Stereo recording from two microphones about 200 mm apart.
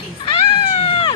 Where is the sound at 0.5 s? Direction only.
30° left (ahead or behind).